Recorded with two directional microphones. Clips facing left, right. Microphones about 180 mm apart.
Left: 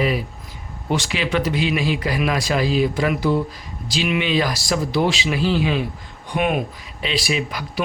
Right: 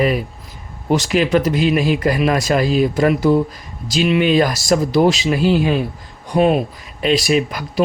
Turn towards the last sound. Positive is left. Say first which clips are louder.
# right 7 dB
turn(degrees=-45)  # may be behind; listen again after turning